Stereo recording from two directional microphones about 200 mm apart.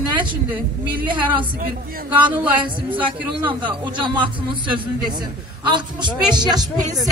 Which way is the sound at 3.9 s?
25° right (ahead or behind).